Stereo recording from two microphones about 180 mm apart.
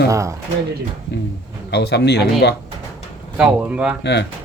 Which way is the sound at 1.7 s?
70° left (ahead or behind).